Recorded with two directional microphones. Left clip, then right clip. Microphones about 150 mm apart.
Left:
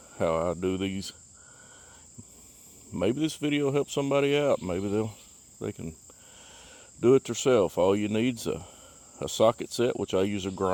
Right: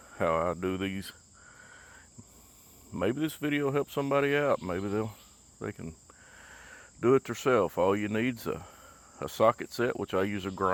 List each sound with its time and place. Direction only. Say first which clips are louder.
0.1 s speech: left 1 dB; 30° left (ahead or behind)
2.9 s speech: left 3 dB; 35° left (ahead or behind)